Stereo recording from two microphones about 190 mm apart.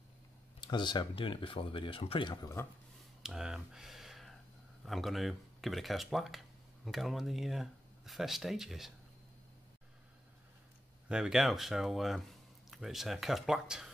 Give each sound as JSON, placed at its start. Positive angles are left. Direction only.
{"t": 0.6, "sound": "speech", "side_deg": 25}
{"t": 3.2, "sound": "a sound", "side_deg": -5}
{"t": 4.8, "sound": "speech", "side_deg": 0}
{"t": 11.1, "sound": "speech", "side_deg": -5}